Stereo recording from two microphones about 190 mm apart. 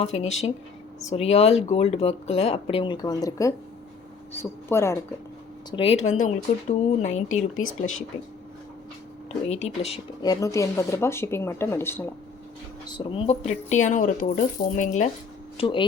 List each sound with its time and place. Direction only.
0.0 s speech: 35° left (ahead or behind); by 4.9 s 15° left (ahead or behind)
5.7 s speech: 30° left (ahead or behind)
9.5 s speech: 35° left (ahead or behind)
10.2 s speech: 15° left (ahead or behind)
12.8 s speech: 25° left (ahead or behind)
15.5 s speech: 25° left (ahead or behind)